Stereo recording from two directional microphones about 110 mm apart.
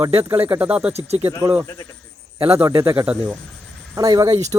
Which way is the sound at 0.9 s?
70° right (ahead or behind).